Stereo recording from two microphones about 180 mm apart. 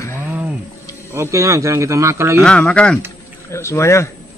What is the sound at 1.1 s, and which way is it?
Speech, 15° right (ahead or behind).